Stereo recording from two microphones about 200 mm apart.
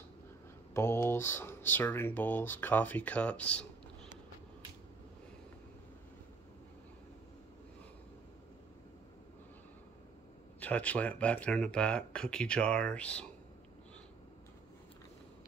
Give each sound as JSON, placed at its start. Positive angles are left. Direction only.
{"t": 0.7, "sound": "speech", "side_deg": 10}
{"t": 10.6, "sound": "speech", "side_deg": 5}